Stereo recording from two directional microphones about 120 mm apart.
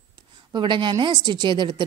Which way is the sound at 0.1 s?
40° right (ahead or behind).